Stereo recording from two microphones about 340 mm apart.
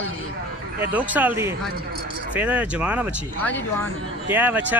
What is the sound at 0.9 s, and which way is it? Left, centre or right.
Speech, centre.